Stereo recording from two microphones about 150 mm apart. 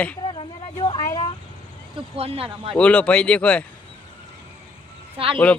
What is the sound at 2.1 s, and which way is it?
Speech, 40° right (ahead or behind).